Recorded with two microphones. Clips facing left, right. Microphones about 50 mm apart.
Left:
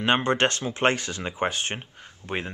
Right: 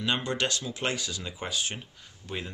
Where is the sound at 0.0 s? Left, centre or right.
Left.